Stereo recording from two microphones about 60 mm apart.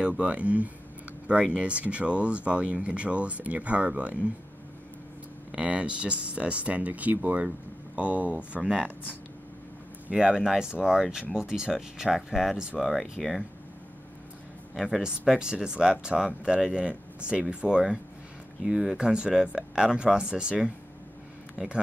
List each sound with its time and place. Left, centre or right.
0.2 s speech: right
5.5 s speech: centre
10.0 s speech: centre
14.8 s speech: centre